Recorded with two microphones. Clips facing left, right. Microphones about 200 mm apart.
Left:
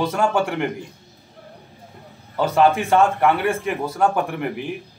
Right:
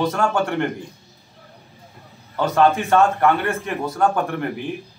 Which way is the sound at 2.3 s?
10° left (ahead or behind).